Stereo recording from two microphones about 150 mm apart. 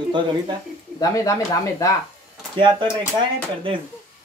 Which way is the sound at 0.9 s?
25° left (ahead or behind).